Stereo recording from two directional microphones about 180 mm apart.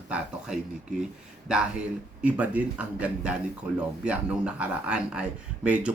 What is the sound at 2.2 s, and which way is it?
A man's voice, 5° right (ahead or behind).